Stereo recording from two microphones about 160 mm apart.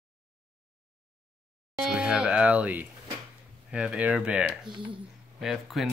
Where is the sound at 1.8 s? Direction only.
5° right (ahead or behind).